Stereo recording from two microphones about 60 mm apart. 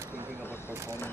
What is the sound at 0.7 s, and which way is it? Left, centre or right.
Speech, right.